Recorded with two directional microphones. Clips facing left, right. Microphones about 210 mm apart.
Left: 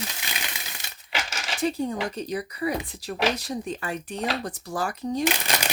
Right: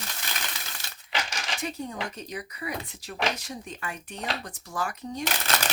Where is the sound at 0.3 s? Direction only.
15° left (ahead or behind).